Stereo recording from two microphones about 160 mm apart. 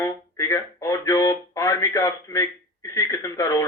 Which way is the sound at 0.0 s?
20° left (ahead or behind).